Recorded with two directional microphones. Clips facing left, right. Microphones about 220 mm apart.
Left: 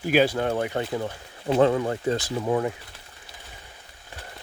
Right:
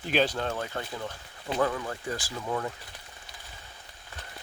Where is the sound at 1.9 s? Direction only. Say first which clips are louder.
Left 9 dB; 25° left (ahead or behind).